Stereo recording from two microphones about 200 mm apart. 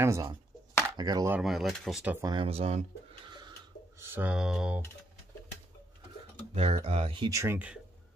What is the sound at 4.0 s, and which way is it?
Speech, 10° right (ahead or behind).